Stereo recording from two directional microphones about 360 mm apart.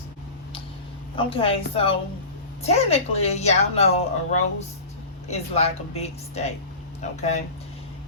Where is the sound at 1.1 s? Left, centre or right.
Centre.